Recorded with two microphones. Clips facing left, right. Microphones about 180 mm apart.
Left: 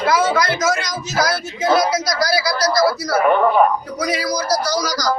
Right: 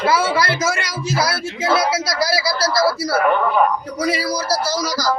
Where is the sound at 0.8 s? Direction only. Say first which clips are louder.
Even; 5° right (ahead or behind).